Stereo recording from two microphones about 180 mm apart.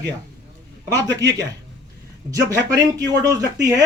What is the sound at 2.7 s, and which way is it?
Speech, 20° right (ahead or behind).